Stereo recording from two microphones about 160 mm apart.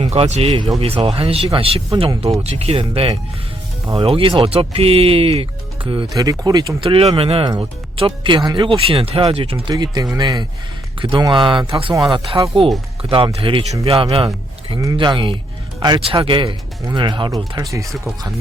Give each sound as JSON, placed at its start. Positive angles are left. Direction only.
{"t": 0.0, "sound": "speech", "side_deg": -40}
{"t": 9.7, "sound": "speech", "side_deg": -25}